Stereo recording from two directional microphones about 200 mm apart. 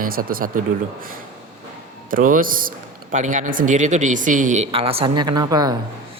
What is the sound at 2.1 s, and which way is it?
Speech, 45° right (ahead or behind).